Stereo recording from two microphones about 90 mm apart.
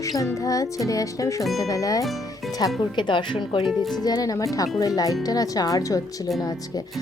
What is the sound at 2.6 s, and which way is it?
Speech, 50° left (ahead or behind).